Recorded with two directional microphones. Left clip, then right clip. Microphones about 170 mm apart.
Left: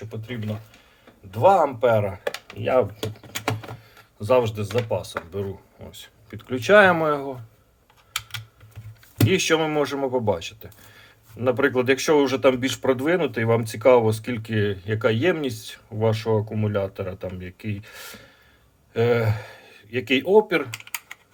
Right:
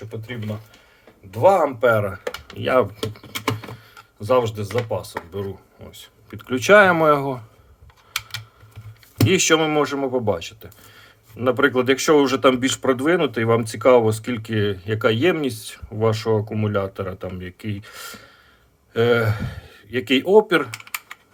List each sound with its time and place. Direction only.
1.3 s speech: 5° right (ahead or behind)
4.2 s speech: 5° right (ahead or behind)
6.3 s speech: 20° right (ahead or behind)
9.2 s speech: 20° right (ahead or behind)